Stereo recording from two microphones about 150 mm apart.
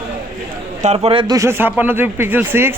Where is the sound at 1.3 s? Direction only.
20° right (ahead or behind).